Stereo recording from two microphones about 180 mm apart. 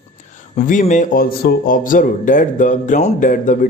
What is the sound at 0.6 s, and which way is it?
Speech, 45° left (ahead or behind).